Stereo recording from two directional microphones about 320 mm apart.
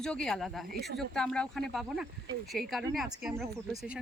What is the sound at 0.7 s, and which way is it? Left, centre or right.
Speech, right.